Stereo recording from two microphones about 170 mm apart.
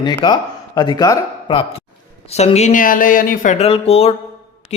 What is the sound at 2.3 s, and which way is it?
Speech, 40° left (ahead or behind).